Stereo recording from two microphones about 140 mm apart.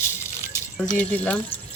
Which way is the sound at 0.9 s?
10° left (ahead or behind).